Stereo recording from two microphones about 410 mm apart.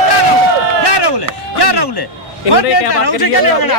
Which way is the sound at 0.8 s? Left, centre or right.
Left.